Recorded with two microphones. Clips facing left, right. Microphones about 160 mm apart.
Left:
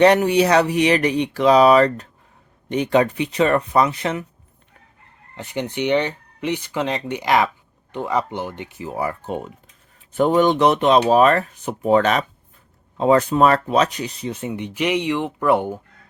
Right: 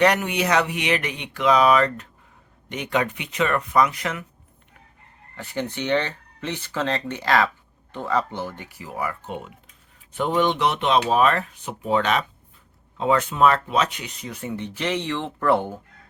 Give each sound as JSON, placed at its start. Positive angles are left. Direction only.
{"t": 0.0, "sound": "speech", "side_deg": 30}
{"t": 5.4, "sound": "speech", "side_deg": 15}